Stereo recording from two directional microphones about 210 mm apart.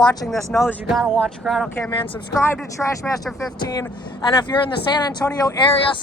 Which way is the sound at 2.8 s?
Centre (ahead or behind).